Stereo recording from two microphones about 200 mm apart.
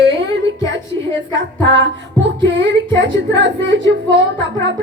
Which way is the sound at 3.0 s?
65° right (ahead or behind).